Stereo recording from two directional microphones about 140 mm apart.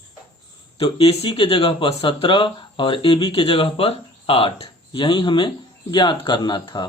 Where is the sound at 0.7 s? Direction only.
40° left (ahead or behind).